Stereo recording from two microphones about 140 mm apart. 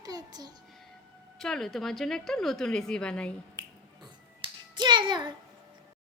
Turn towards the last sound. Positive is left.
turn(degrees=-35)  # may be behind; listen again after turning